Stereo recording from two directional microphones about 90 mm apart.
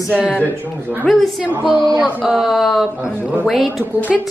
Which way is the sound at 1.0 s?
Centre (ahead or behind).